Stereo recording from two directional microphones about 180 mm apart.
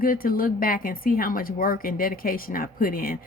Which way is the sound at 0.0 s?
50° left (ahead or behind).